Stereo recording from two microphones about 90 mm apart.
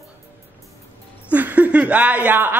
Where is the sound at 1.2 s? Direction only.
15° right (ahead or behind).